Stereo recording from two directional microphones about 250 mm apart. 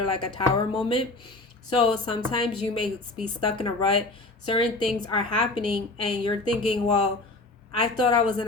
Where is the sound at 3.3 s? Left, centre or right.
Centre.